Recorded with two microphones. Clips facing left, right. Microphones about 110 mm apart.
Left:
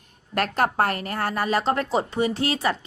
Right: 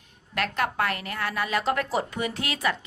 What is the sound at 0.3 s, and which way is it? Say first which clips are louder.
A woman's voice: left 5 dB; 45° left (ahead or behind).